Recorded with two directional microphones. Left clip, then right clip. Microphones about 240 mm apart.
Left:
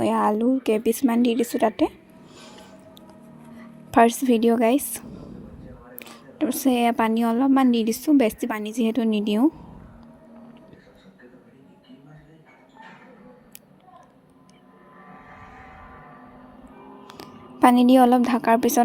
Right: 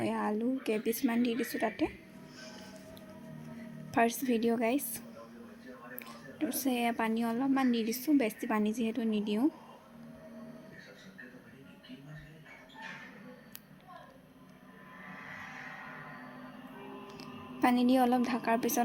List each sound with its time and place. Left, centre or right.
0.0 s a woman's voice: left
3.9 s a woman's voice: left
17.1 s a woman's voice: left